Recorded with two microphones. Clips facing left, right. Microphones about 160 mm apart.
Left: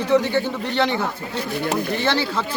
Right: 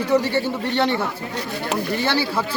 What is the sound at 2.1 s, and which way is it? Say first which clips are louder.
Speech: even; 10° right (ahead or behind).